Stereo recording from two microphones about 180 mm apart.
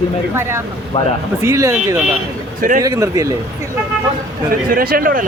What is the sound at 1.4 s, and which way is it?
Speech, 15° right (ahead or behind).